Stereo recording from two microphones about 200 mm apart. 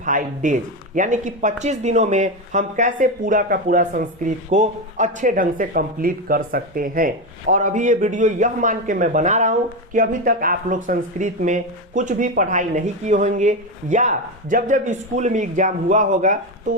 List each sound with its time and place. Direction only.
0.0 s speech: 40° right (ahead or behind)